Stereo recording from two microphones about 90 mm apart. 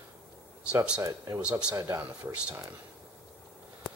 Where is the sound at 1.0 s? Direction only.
40° right (ahead or behind).